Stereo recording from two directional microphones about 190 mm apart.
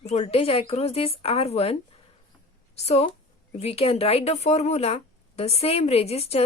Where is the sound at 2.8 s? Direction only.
35° left (ahead or behind).